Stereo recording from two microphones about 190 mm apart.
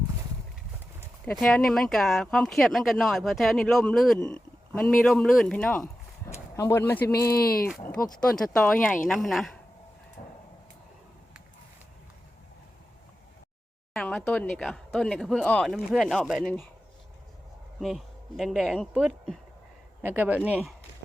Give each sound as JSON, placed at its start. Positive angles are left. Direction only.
{"t": 1.2, "sound": "speech", "side_deg": 5}
{"t": 5.8, "sound": "a sound", "side_deg": 15}
{"t": 7.3, "sound": "speech", "side_deg": 50}
{"t": 7.8, "sound": "speech", "side_deg": 10}
{"t": 10.2, "sound": "a sound", "side_deg": 40}
{"t": 13.9, "sound": "speech", "side_deg": 5}
{"t": 17.7, "sound": "speech", "side_deg": 0}